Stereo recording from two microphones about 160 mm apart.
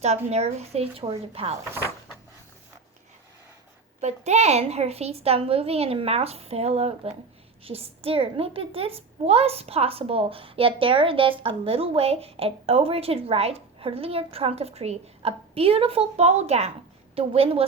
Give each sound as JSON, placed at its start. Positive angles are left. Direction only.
{"t": 0.3, "sound": "a child's voice", "side_deg": -40}
{"t": 4.0, "sound": "a child's voice", "side_deg": -45}